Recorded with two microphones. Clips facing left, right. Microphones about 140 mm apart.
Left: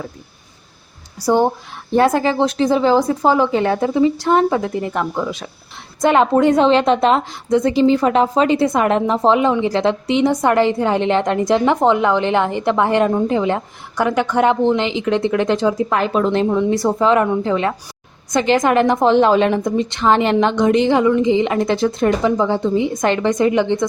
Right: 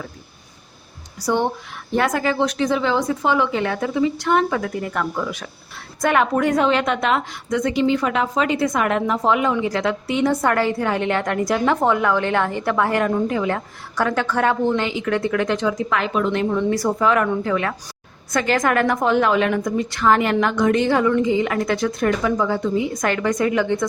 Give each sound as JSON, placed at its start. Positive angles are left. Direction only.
{"t": 2.0, "sound": "a woman's voice", "side_deg": 30}